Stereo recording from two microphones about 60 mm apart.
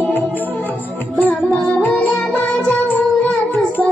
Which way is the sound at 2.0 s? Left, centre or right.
Left.